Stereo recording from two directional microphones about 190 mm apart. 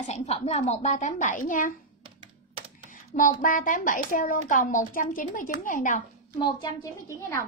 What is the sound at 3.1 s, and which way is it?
Speech, 45° left (ahead or behind).